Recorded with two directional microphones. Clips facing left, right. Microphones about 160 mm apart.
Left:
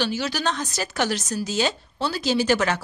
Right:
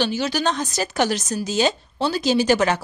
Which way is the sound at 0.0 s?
20° right (ahead or behind).